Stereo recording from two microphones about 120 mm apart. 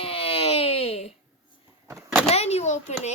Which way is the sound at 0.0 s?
50° left (ahead or behind).